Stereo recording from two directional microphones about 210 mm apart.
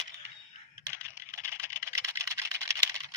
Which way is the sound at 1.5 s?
15° right (ahead or behind).